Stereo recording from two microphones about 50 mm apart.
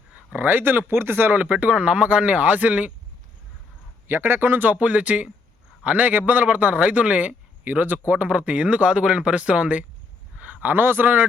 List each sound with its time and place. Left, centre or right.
0.1 s speech: right
1.4 s speech: right
4.0 s a man's voice: right; by 9.3 s centre
9.3 s speech: right